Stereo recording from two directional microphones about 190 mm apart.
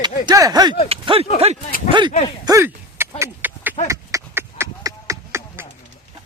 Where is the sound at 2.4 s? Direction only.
15° right (ahead or behind).